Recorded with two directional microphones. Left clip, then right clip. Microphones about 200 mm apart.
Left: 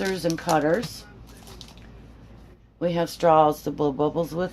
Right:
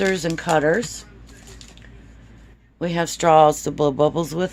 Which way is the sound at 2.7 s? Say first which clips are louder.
Right 2 dB; 40° right (ahead or behind).